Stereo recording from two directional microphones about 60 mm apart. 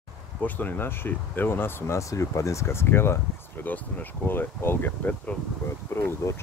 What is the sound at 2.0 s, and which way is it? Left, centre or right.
Speech, left.